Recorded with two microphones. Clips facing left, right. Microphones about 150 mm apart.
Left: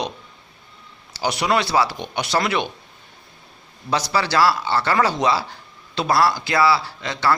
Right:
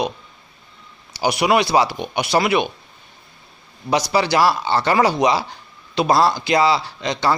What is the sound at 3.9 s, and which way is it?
A man's voice, 15° right (ahead or behind).